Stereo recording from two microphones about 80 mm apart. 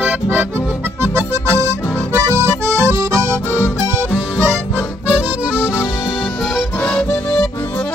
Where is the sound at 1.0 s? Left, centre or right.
Right.